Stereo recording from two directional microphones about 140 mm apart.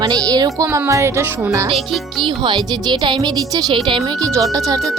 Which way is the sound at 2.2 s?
35° right (ahead or behind).